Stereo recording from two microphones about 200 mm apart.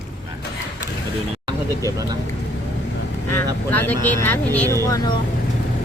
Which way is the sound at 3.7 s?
10° left (ahead or behind).